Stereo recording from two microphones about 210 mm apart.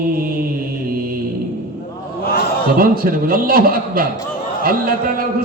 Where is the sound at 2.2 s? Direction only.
50° left (ahead or behind).